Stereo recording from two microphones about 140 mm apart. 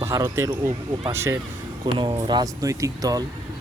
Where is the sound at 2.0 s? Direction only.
30° right (ahead or behind).